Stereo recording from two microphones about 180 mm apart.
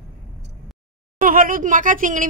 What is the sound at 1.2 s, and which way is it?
Speech, 50° right (ahead or behind).